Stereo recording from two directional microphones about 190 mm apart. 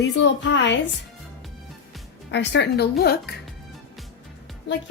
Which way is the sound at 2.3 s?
70° left (ahead or behind).